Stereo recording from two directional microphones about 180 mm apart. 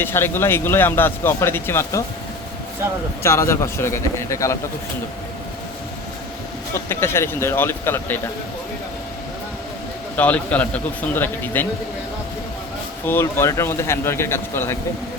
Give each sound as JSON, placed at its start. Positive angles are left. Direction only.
{"t": 0.0, "sound": "a man's voice", "side_deg": 10}
{"t": 3.2, "sound": "a man's voice", "side_deg": 15}
{"t": 6.7, "sound": "a man's voice", "side_deg": 15}
{"t": 10.2, "sound": "a man's voice", "side_deg": 10}
{"t": 13.1, "sound": "a man's voice", "side_deg": 15}